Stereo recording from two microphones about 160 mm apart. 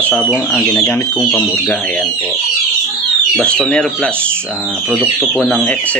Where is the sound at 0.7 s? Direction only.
15° left (ahead or behind).